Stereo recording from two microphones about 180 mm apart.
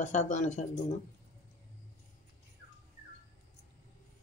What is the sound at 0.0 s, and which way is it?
Speech, 40° left (ahead or behind).